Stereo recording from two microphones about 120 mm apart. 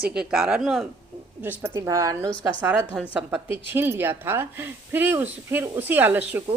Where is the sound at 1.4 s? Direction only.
15° right (ahead or behind).